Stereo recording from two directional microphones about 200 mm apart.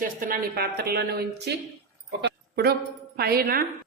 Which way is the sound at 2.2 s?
55° right (ahead or behind).